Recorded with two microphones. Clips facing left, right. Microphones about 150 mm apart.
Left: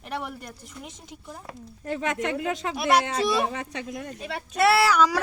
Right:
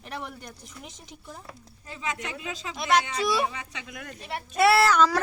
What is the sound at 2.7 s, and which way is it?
Speech, 5° left (ahead or behind).